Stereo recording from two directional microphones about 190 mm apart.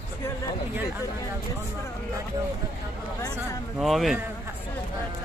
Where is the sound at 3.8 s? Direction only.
Centre (ahead or behind).